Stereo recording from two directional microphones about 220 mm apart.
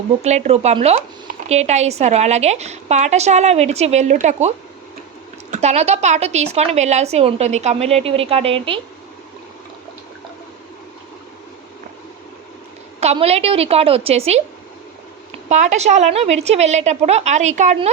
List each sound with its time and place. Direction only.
0.2 s a woman's voice: 30° right (ahead or behind)
13.0 s a woman's voice: 30° right (ahead or behind)
15.4 s speech: 30° right (ahead or behind)